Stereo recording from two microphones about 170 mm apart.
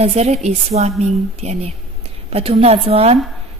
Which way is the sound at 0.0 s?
40° right (ahead or behind).